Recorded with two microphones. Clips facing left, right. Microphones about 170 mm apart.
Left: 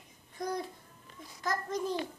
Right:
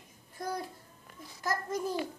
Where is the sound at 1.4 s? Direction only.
5° right (ahead or behind).